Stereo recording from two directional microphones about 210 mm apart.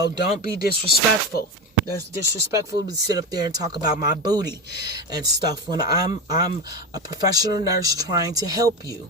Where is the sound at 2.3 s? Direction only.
15° right (ahead or behind).